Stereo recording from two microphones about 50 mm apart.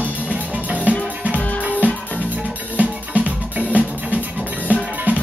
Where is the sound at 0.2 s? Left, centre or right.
Right.